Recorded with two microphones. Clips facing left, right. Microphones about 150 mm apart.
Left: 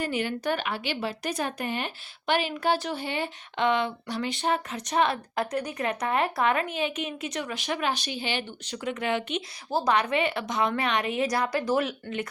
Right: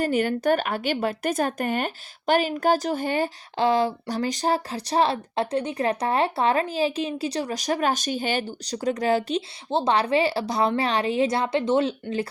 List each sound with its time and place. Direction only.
0.0 s a woman's voice: 45° right (ahead or behind)
9.6 s a woman's voice: 25° right (ahead or behind)